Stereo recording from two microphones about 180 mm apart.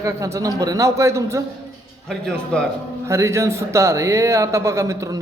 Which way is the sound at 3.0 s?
15° right (ahead or behind).